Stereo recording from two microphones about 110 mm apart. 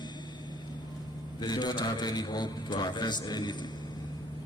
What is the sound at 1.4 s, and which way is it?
A man's voice, 40° left (ahead or behind).